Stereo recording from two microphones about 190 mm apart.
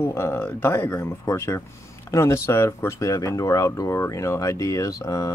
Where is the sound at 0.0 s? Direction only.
15° left (ahead or behind).